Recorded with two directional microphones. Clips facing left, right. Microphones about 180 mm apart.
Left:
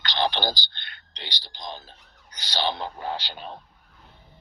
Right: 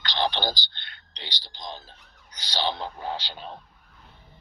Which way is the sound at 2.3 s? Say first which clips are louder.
Left 1 dB; 60° left (ahead or behind).